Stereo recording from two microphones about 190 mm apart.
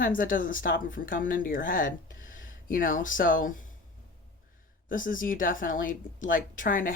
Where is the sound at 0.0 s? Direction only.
45° left (ahead or behind).